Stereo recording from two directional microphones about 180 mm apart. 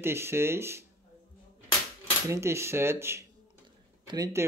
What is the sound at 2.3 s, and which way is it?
Speech, 15° right (ahead or behind).